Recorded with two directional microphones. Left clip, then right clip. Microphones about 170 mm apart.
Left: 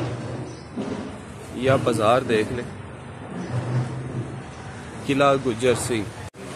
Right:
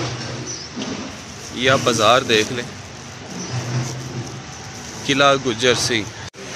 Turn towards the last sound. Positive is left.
turn(degrees=5)  # may be behind; listen again after turning